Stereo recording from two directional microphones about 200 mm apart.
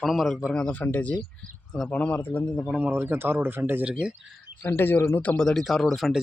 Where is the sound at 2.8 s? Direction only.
10° right (ahead or behind).